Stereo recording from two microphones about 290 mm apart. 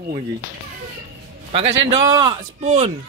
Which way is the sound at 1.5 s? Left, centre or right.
Centre.